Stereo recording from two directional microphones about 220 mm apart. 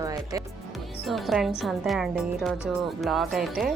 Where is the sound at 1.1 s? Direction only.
Centre (ahead or behind).